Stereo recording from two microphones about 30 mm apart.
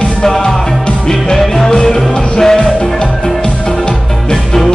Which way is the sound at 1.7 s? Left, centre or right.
Left.